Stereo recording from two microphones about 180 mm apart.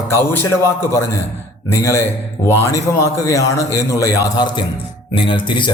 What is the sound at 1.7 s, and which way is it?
A man's voice, 15° left (ahead or behind).